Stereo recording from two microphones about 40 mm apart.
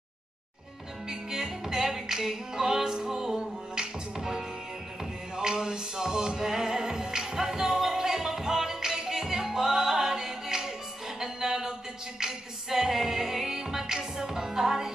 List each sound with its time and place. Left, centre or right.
1.0 s music: centre